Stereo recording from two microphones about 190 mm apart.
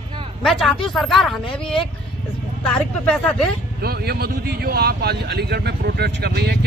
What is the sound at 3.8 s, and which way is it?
Speech, 55° right (ahead or behind).